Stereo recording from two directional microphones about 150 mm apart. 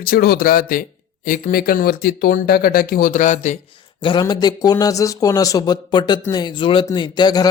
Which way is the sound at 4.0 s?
30° left (ahead or behind).